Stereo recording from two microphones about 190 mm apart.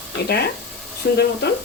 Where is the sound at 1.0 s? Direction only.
60° left (ahead or behind).